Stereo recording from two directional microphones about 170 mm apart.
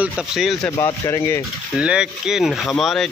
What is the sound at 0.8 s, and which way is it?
Speech, 15° left (ahead or behind).